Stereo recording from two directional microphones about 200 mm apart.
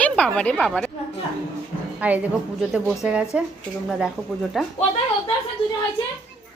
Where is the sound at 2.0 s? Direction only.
5° right (ahead or behind).